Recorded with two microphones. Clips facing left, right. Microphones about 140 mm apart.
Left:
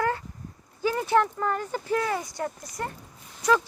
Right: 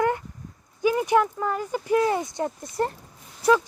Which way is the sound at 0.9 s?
15° right (ahead or behind).